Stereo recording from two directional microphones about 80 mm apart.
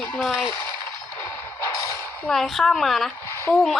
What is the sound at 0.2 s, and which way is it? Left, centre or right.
Speech, centre.